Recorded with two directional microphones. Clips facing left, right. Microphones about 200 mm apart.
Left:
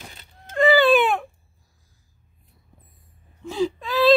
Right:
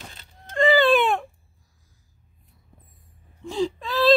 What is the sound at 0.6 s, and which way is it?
Baby cry, 5° left (ahead or behind).